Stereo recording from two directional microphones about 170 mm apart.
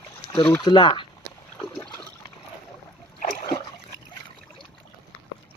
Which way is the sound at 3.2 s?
50° left (ahead or behind).